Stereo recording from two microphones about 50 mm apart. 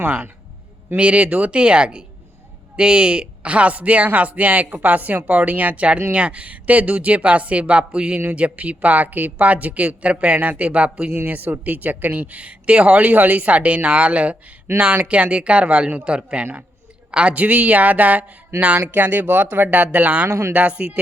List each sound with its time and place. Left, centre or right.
0.0 s speech: right
11.3 s speech: right